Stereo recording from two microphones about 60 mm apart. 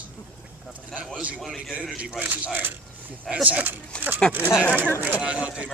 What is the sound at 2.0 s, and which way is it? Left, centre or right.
Speech, right.